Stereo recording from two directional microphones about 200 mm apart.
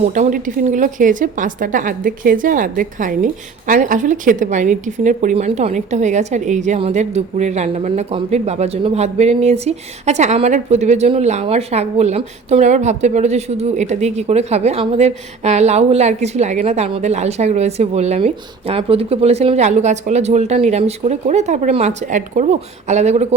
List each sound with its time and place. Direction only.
0.0 s a woman's voice: 40° right (ahead or behind)